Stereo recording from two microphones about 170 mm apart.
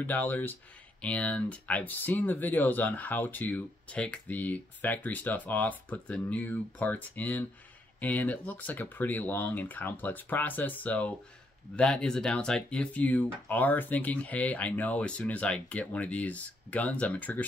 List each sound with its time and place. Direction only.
0.0 s speech: 10° left (ahead or behind)